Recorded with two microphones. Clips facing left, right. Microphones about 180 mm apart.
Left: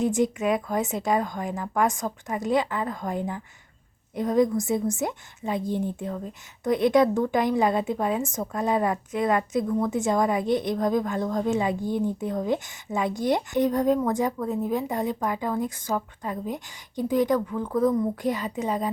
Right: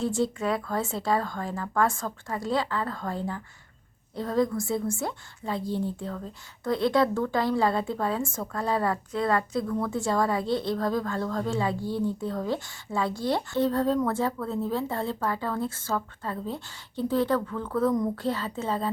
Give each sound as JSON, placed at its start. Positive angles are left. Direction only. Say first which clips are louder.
{"t": 0.0, "sound": "a woman's voice", "louder": "left 3 dB", "side_deg": 20}